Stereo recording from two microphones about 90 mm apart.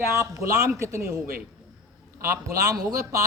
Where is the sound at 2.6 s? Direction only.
45° right (ahead or behind).